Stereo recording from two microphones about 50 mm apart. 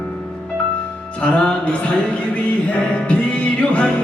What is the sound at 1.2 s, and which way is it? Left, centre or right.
Music, centre.